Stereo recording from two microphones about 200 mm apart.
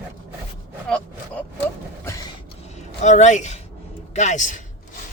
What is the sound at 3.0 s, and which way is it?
A man's voice, 35° left (ahead or behind).